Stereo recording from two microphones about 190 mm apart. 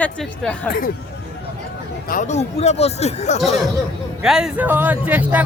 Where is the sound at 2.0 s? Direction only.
45° left (ahead or behind).